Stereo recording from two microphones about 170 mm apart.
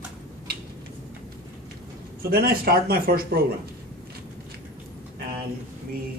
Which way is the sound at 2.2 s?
65° right (ahead or behind).